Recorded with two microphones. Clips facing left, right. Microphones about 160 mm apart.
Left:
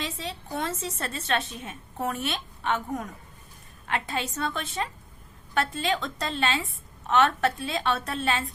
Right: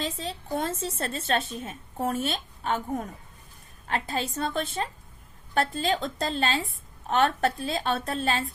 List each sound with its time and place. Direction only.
0.0 s a woman's voice: 35° right (ahead or behind)